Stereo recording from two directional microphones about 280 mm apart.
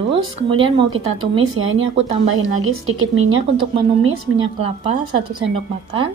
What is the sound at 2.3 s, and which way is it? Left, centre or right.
Speech, right.